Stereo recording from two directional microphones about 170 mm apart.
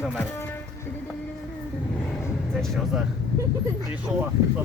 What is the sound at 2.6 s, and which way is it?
Speech, 5° right (ahead or behind).